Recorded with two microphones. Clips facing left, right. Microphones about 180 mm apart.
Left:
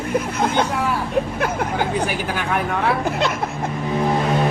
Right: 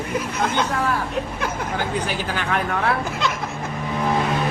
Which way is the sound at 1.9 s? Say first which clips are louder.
Left 2 dB; 10° left (ahead or behind).